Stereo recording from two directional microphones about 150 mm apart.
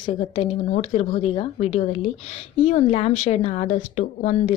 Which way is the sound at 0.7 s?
40° left (ahead or behind).